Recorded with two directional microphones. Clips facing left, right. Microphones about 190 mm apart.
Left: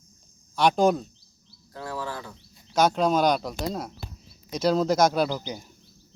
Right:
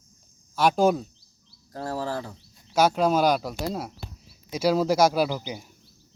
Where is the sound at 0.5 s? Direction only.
5° right (ahead or behind).